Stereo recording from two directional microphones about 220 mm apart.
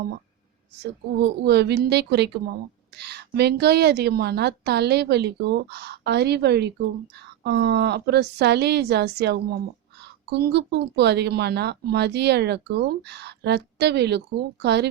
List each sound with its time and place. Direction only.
0.8 s a woman's voice: 50° right (ahead or behind)